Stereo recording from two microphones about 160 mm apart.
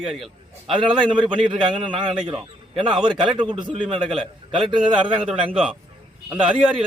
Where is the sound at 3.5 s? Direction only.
35° right (ahead or behind).